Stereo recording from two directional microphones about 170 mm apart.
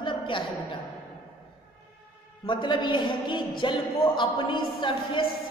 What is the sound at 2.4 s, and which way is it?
A woman's voice, 30° left (ahead or behind).